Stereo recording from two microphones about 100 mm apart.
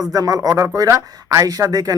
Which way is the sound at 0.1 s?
40° right (ahead or behind).